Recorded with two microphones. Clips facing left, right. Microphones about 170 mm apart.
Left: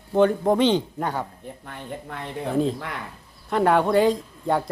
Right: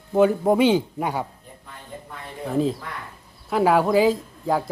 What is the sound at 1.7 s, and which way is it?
Speech, 75° left (ahead or behind).